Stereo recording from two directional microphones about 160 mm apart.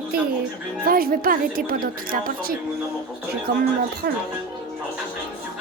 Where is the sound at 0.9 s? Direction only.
65° right (ahead or behind).